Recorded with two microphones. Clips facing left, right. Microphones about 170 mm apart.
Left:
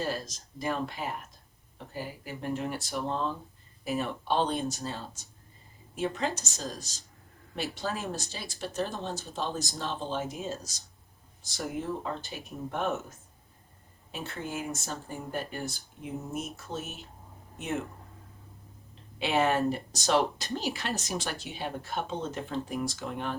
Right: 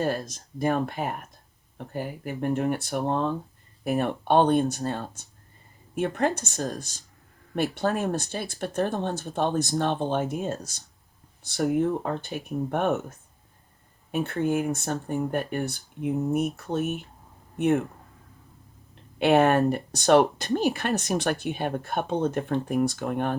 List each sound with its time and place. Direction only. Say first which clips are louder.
0.0 s speech: right 6 dB; 55° right (ahead or behind)
19.2 s speech: right 7 dB; 60° right (ahead or behind)